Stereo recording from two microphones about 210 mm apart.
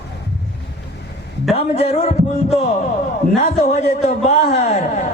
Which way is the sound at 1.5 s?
30° left (ahead or behind).